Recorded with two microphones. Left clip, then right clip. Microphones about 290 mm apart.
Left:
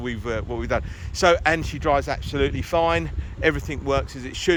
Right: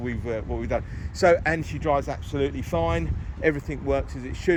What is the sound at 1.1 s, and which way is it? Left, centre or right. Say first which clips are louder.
Speech: left 1 dB; centre.